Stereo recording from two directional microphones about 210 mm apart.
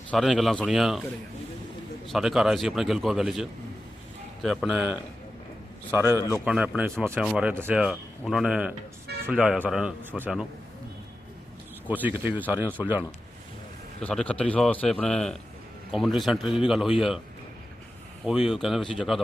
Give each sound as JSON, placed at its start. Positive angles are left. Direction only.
{"t": 0.1, "sound": "a man's voice", "side_deg": 0}
{"t": 2.0, "sound": "a man's voice", "side_deg": 0}
{"t": 6.1, "sound": "a man's voice", "side_deg": 15}
{"t": 6.4, "sound": "a man's voice", "side_deg": -5}
{"t": 11.9, "sound": "a man's voice", "side_deg": -10}
{"t": 14.0, "sound": "a man's voice", "side_deg": 5}
{"t": 18.3, "sound": "a man's voice", "side_deg": 0}